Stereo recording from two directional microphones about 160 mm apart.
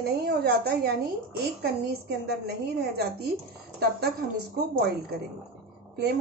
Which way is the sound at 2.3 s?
85° right.